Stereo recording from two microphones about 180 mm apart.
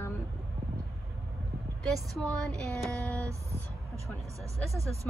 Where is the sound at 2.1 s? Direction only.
5° left (ahead or behind).